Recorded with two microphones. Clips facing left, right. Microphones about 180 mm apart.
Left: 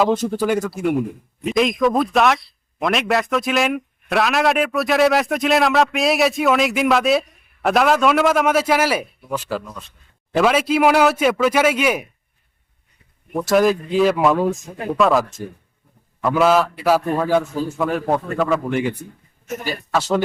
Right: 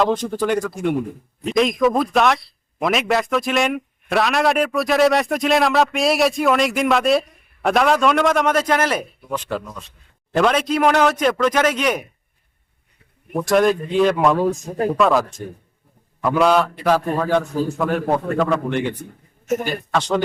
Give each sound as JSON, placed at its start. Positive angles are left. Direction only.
{"t": 0.0, "sound": "speech", "side_deg": 5}
{"t": 13.3, "sound": "speech", "side_deg": 5}
{"t": 14.6, "sound": "speech", "side_deg": -40}
{"t": 14.8, "sound": "speech", "side_deg": 0}